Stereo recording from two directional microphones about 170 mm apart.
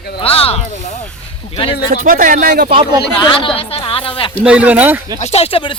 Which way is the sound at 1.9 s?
50° right (ahead or behind).